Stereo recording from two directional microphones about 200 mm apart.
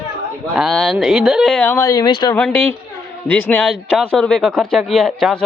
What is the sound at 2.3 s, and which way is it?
Speech, 10° left (ahead or behind).